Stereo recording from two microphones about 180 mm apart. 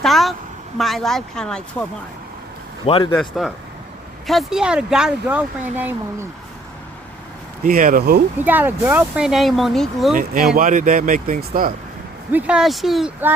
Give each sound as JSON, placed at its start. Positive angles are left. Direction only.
{"t": 0.0, "sound": "speech", "side_deg": 0}
{"t": 2.8, "sound": "a man's voice", "side_deg": 30}
{"t": 3.2, "sound": "speech", "side_deg": 0}
{"t": 7.6, "sound": "speech", "side_deg": -50}
{"t": 8.4, "sound": "speech", "side_deg": -10}
{"t": 10.2, "sound": "speech", "side_deg": -55}
{"t": 12.3, "sound": "speech", "side_deg": -5}